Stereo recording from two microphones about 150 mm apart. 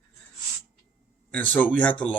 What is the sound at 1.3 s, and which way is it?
Speech, 10° left (ahead or behind).